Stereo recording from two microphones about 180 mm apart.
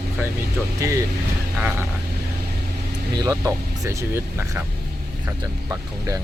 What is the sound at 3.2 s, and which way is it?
Speech, 20° right (ahead or behind).